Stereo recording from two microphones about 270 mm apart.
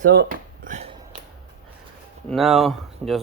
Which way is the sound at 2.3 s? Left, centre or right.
Centre.